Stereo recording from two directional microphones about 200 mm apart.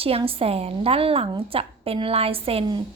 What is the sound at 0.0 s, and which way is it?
A woman's voice, 30° right (ahead or behind).